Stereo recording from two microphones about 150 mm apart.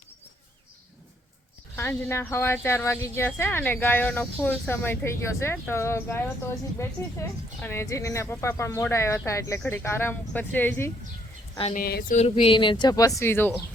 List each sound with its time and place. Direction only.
1.7 s speech: 15° left (ahead or behind)
11.7 s speech: 85° left
12.1 s speech: 40° left (ahead or behind); by 13.5 s 15° left (ahead or behind)